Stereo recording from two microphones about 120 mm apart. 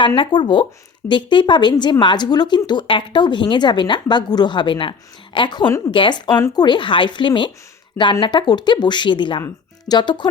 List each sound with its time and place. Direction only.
0.2 s speech: 45° left (ahead or behind)